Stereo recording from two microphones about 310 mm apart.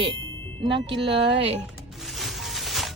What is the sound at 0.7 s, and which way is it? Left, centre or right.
Speech, centre.